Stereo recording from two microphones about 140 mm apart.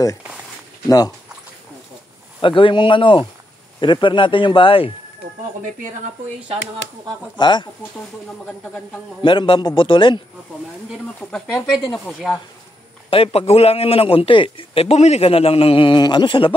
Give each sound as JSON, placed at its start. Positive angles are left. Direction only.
{"t": 0.8, "sound": "speech", "side_deg": 25}
{"t": 2.4, "sound": "speech", "side_deg": 35}
{"t": 7.3, "sound": "speech", "side_deg": 35}
{"t": 8.3, "sound": "speech", "side_deg": 0}
{"t": 9.2, "sound": "speech", "side_deg": 35}
{"t": 11.1, "sound": "speech", "side_deg": 5}
{"t": 13.1, "sound": "a man's voice", "side_deg": 40}